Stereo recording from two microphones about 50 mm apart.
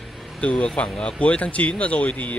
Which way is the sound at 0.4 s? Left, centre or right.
Left.